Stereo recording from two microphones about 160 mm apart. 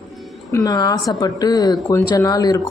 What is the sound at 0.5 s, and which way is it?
Speech, 25° left (ahead or behind).